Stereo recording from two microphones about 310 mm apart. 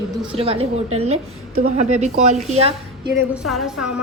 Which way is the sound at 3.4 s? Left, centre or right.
Centre.